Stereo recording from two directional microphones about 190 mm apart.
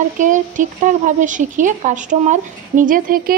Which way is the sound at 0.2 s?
40° right (ahead or behind).